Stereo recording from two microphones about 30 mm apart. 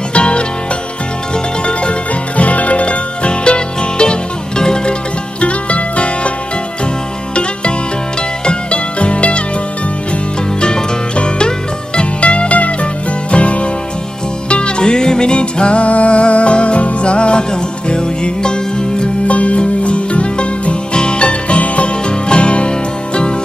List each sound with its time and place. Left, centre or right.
0.1 s music: left
1.7 s music: left
5.4 s music: left
8.5 s music: left
10.6 s music: left
12.0 s music: left
14.5 s music: left
19.2 s music: left